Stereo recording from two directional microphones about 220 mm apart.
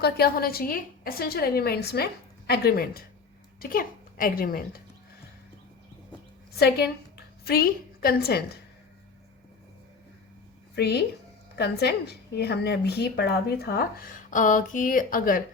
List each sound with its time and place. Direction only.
0.0 s a woman's voice: 45° left (ahead or behind)
6.5 s a woman's voice: 45° left (ahead or behind)
10.8 s a woman's voice: 45° left (ahead or behind)
14.3 s speech: 35° left (ahead or behind)